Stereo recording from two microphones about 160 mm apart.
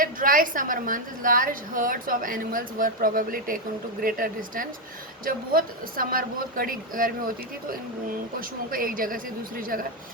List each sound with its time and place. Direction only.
0.0 s a woman's voice: 60° right (ahead or behind)